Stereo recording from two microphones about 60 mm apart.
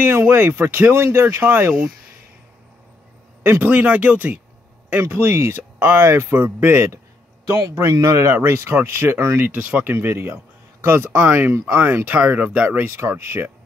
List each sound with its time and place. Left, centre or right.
0.0 s speech: right
3.6 s speech: right
5.2 s speech: right
5.6 s speech: right
7.4 s a man's voice: right
7.9 s speech: right
9.6 s speech: right
9.8 s speech: right
11.1 s speech: right